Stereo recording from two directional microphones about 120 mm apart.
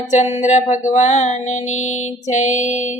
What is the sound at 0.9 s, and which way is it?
Music, 75° left (ahead or behind).